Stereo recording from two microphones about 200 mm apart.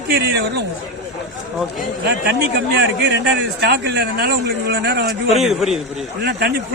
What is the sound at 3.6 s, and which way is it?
Speech, 55° right (ahead or behind).